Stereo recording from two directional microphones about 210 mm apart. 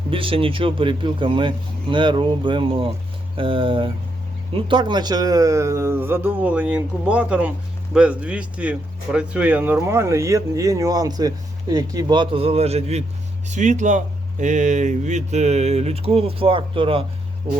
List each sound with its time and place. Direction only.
0.1 s speech: 25° right (ahead or behind)